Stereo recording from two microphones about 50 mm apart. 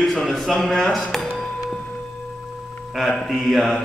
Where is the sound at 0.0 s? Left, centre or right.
Centre.